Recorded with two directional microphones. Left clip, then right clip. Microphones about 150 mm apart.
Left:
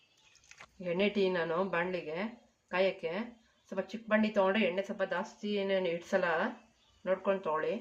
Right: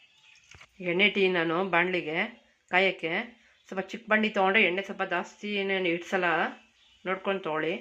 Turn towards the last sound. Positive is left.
turn(degrees=-35)  # may be behind; listen again after turning